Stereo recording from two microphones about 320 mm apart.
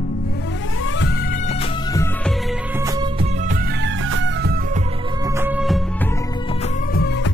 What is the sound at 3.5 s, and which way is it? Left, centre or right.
Music, right.